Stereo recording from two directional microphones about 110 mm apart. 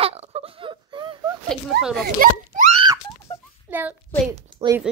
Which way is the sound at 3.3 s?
30° left (ahead or behind).